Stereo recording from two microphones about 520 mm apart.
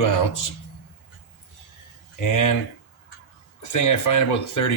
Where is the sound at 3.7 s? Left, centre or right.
Left.